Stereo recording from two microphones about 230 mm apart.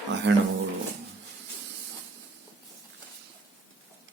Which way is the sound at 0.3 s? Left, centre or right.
Right.